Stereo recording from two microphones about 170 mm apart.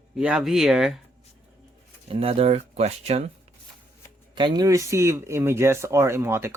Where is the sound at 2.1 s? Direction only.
35° right (ahead or behind).